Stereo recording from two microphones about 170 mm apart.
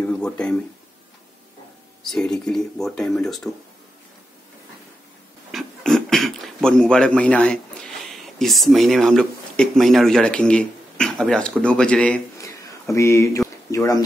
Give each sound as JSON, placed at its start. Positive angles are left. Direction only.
{"t": 0.0, "sound": "speech", "side_deg": 5}
{"t": 2.0, "sound": "speech", "side_deg": 0}
{"t": 5.5, "sound": "speech", "side_deg": 0}
{"t": 12.4, "sound": "a sound", "side_deg": 15}
{"t": 13.7, "sound": "speech", "side_deg": 20}